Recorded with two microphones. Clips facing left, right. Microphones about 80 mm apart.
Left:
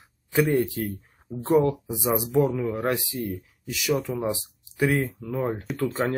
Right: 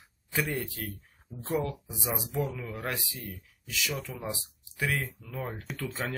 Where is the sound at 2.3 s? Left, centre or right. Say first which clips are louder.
Left 11 dB; left.